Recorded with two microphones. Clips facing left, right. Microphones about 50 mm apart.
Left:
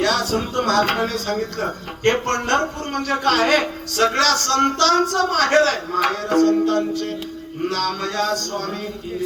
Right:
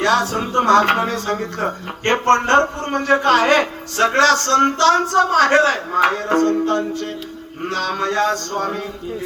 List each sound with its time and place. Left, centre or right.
0.0 s speech: right